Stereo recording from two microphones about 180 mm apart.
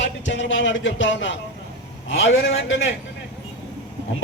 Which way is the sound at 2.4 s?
90° left.